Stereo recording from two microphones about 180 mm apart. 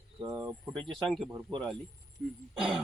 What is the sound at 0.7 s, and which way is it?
Speech, centre (ahead or behind).